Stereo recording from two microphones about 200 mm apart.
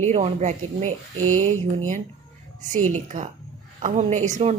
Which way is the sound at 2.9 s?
40° right (ahead or behind).